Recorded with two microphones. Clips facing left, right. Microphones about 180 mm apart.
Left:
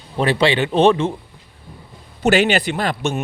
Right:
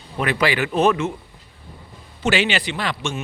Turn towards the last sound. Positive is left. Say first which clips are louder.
# left 5 dB
turn(degrees=45)  # may be behind; listen again after turning